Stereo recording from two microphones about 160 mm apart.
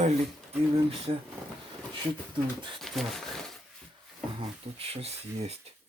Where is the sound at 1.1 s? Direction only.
35° right (ahead or behind).